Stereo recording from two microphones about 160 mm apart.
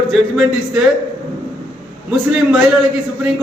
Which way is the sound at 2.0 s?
5° right (ahead or behind).